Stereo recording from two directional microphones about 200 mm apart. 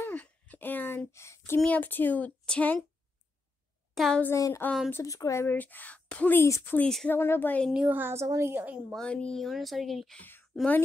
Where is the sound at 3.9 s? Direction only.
Centre (ahead or behind).